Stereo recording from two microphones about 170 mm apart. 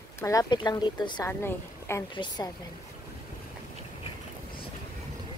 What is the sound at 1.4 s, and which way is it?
A woman's voice, 15° left (ahead or behind).